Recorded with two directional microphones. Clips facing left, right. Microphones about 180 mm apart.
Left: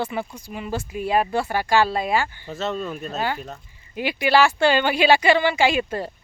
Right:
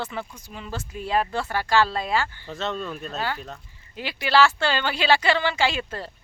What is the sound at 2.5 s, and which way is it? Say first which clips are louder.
Speech: left 3 dB; 5° left (ahead or behind).